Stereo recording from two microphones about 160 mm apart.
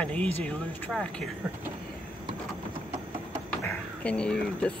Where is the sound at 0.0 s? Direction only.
10° left (ahead or behind).